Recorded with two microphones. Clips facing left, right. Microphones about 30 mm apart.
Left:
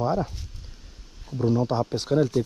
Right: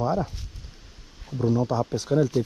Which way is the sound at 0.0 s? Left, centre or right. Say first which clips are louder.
Even; centre.